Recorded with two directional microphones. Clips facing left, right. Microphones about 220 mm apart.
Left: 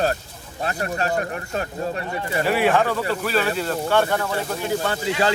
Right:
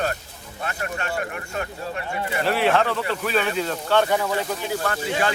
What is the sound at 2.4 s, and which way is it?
Speech, 10° left (ahead or behind).